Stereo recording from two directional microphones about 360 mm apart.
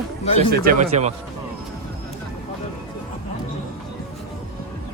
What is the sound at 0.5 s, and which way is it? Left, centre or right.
Speech, right.